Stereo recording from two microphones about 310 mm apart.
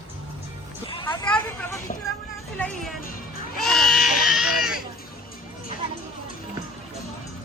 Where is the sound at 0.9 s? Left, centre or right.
Centre.